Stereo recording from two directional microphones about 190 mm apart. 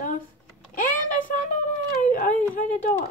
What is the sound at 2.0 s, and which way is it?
Speech, 45° left (ahead or behind).